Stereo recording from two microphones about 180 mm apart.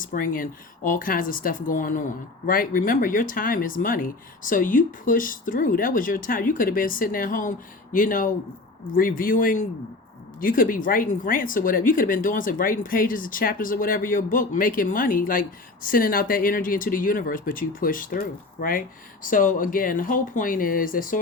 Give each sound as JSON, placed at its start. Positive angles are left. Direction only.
{"t": 0.0, "sound": "speech", "side_deg": 50}